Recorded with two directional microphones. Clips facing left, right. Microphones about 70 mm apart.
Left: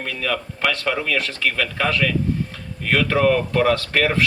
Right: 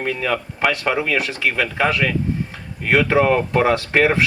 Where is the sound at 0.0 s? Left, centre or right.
Right.